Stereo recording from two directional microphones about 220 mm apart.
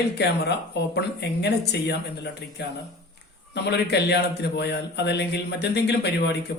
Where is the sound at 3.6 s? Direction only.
50° left (ahead or behind).